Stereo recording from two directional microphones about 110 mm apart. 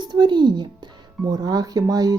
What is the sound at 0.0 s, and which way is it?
Speech, 45° right (ahead or behind).